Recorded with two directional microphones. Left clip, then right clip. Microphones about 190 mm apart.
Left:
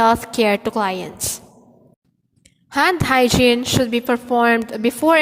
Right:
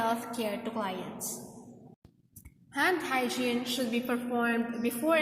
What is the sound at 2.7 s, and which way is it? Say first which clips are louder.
A woman's voice: left 13 dB; 50° left (ahead or behind).